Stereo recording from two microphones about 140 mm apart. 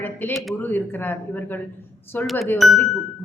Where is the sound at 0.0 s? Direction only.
15° left (ahead or behind).